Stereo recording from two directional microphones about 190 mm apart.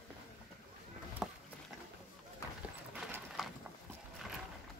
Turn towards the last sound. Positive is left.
turn(degrees=0)  # may be behind; listen again after turning